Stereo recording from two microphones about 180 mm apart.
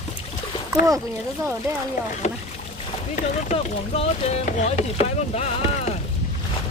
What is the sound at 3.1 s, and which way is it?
Speech, 40° left (ahead or behind).